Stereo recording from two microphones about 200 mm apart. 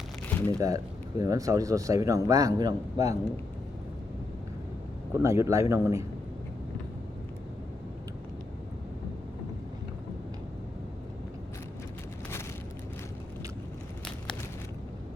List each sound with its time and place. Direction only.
0.3 s a sound: 10° left (ahead or behind)
1.2 s a man's voice: 15° right (ahead or behind)
5.1 s a man's voice: 15° right (ahead or behind)